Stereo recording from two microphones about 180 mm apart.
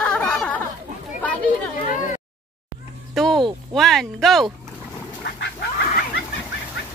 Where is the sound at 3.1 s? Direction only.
Centre (ahead or behind).